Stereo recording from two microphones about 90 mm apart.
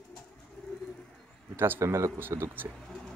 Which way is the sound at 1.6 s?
30° right (ahead or behind).